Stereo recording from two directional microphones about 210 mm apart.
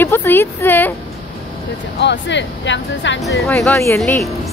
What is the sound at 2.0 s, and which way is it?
Speech, 55° left (ahead or behind).